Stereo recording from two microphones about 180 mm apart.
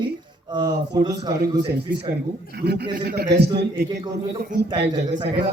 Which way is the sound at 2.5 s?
65° right (ahead or behind).